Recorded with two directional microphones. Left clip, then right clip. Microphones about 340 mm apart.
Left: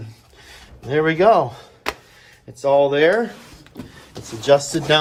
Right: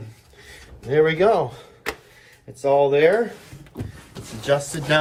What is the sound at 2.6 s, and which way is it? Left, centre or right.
Speech, left.